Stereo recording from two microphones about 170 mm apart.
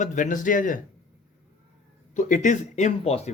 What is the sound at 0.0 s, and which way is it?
Speech, 50° left (ahead or behind).